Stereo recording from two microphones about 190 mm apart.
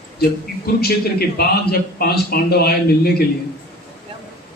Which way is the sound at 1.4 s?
55° left (ahead or behind).